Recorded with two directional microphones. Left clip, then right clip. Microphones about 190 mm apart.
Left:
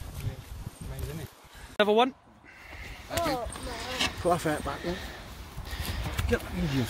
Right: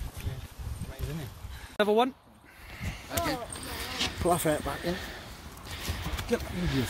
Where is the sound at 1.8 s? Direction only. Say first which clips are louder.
Left 2 dB; 5° left (ahead or behind).